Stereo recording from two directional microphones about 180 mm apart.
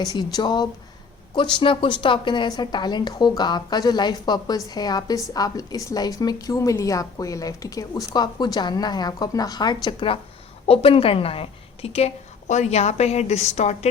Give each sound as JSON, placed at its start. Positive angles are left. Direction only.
{"t": 0.0, "sound": "a woman's voice", "side_deg": 20}